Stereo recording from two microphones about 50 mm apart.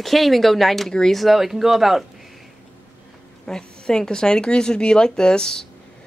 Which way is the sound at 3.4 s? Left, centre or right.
Centre.